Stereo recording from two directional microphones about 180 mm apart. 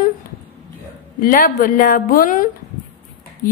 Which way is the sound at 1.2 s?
50° left (ahead or behind).